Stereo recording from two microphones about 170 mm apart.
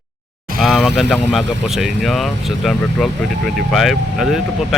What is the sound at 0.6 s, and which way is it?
Speech, centre (ahead or behind).